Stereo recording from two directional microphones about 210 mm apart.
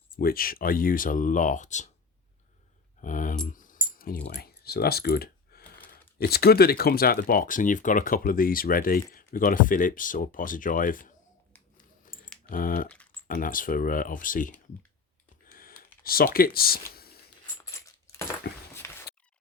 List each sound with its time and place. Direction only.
0.2 s speech: 45° left (ahead or behind)
3.0 s speech: 40° left (ahead or behind)
3.4 s keys jangling: 40° left (ahead or behind)
5.9 s speech: 50° left (ahead or behind)
12.0 s typing: 40° left (ahead or behind)
13.2 s speech: 40° left (ahead or behind)
15.5 s computer keyboard: 45° left (ahead or behind)
16.9 s a sound: 45° left (ahead or behind)
18.5 s a sound: 50° left (ahead or behind)
18.8 s a sound: 10° left (ahead or behind)